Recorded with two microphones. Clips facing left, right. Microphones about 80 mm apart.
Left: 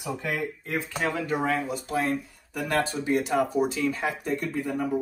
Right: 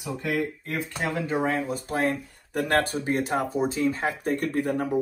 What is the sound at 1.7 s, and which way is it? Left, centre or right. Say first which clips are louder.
Speech: right 1 dB; right.